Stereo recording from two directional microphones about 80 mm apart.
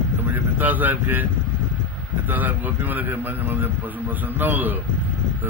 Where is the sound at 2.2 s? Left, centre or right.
Right.